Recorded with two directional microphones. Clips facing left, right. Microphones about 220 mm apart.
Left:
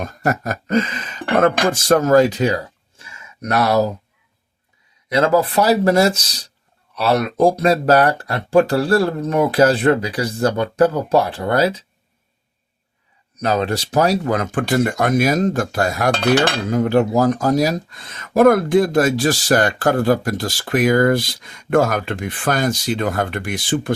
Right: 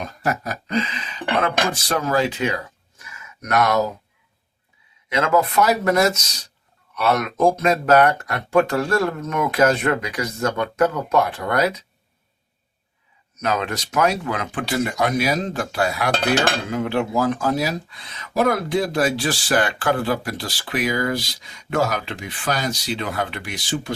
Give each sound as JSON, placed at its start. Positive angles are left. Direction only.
{"t": 0.0, "sound": "a sound", "side_deg": 50}
{"t": 1.4, "sound": "speech", "side_deg": 45}
{"t": 5.0, "sound": "speech", "side_deg": 35}
{"t": 13.3, "sound": "speech", "side_deg": 35}